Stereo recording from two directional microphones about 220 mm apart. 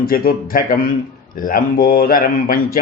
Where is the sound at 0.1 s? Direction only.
40° left (ahead or behind).